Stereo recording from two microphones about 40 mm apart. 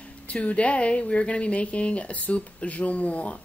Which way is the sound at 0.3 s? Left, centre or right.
Left.